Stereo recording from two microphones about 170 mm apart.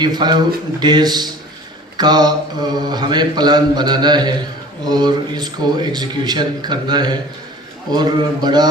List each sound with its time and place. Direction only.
0.0 s mantra: 25° right (ahead or behind)